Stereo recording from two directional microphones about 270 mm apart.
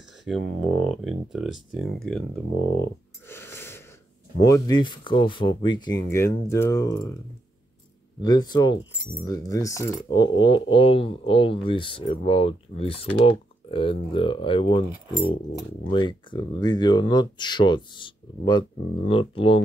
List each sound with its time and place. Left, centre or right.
0.2 s speech: centre
3.3 s a sound: centre
4.4 s speech: centre
8.2 s speech: centre
15.9 s speech: centre